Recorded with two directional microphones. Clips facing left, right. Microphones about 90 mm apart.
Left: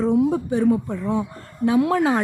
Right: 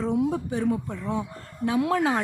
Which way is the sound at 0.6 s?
40° left (ahead or behind).